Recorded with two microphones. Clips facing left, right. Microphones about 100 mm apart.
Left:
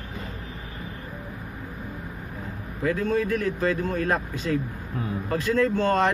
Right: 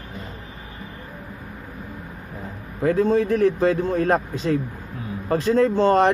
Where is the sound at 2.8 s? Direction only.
35° right (ahead or behind).